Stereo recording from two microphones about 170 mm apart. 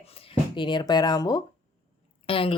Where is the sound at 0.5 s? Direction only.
25° left (ahead or behind).